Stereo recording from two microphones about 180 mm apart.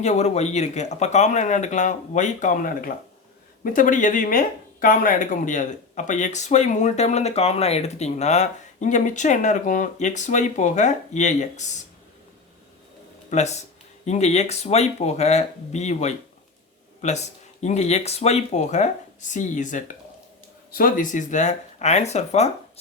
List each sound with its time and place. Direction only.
0.0 s speech: 40° left (ahead or behind)
13.3 s speech: 40° left (ahead or behind)